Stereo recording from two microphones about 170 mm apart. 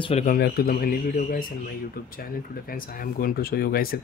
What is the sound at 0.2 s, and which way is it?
Speech, 60° left (ahead or behind).